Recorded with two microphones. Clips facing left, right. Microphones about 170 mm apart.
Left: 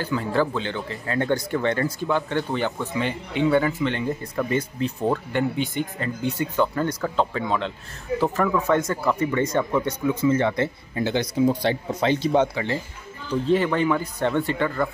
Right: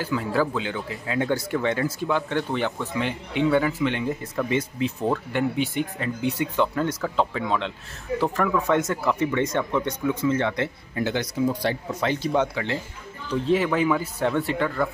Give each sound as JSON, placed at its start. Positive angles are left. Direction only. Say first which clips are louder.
{"t": 0.0, "sound": "speech", "louder": "left 1 dB", "side_deg": -5}
{"t": 10.6, "sound": "speech", "louder": "left 2 dB", "side_deg": 20}
{"t": 13.3, "sound": "speech", "louder": "left 1 dB", "side_deg": 0}